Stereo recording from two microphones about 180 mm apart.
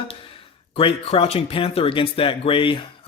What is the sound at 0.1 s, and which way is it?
Speech, 30° left (ahead or behind).